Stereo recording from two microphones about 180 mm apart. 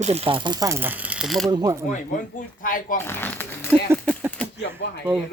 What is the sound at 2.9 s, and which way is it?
Speech, 10° left (ahead or behind).